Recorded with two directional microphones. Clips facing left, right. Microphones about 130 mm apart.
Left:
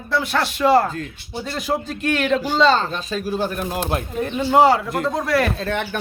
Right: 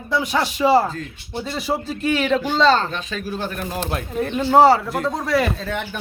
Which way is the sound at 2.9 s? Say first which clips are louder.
Left 3 dB; 35° left (ahead or behind).